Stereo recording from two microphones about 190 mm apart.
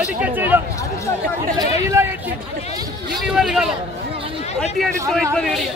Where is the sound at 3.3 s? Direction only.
5° right (ahead or behind).